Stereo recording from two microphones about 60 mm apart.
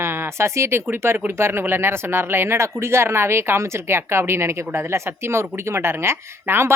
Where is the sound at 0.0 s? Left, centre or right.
Right.